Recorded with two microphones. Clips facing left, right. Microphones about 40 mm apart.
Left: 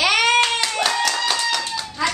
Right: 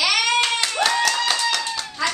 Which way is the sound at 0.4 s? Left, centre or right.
Centre.